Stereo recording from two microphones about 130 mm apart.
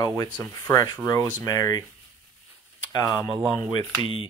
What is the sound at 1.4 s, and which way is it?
Speech, 25° left (ahead or behind).